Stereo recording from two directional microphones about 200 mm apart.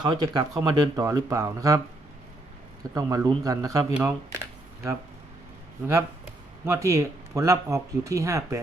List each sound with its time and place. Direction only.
0.0 s speech: 20° right (ahead or behind)
2.9 s speech: 20° right (ahead or behind)
4.0 s computer keyboard: 15° right (ahead or behind)
6.7 s speech: 15° right (ahead or behind)